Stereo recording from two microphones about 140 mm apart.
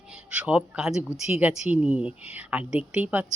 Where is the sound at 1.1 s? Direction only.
50° left (ahead or behind).